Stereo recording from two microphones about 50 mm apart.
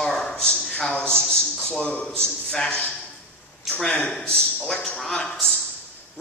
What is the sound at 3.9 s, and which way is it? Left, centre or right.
Speech, left.